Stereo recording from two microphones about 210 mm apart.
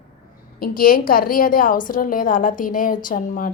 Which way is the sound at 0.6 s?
45° left (ahead or behind).